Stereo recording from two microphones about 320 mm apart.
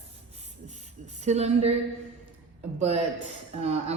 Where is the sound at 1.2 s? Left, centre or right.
Right.